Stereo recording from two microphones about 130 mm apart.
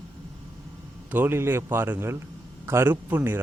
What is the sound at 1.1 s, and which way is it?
Speech, 15° right (ahead or behind).